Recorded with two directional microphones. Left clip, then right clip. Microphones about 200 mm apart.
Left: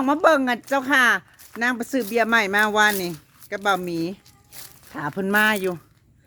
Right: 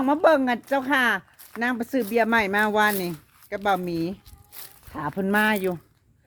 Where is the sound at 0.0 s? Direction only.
20° left (ahead or behind).